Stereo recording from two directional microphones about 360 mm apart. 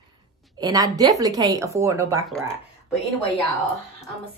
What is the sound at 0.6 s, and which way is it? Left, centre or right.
Speech, centre.